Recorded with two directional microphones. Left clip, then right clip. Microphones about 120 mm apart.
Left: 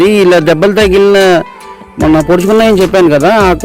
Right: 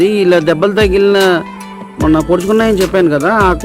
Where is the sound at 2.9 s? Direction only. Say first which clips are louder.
Left 5 dB; 55° left (ahead or behind).